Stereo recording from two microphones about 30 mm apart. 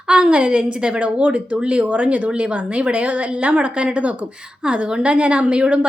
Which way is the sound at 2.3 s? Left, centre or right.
Right.